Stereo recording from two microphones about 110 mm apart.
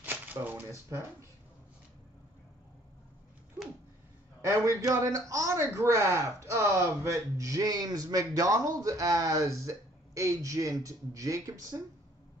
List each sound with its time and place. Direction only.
0.0 s speech: 15° right (ahead or behind)
4.5 s a man's voice: 30° right (ahead or behind)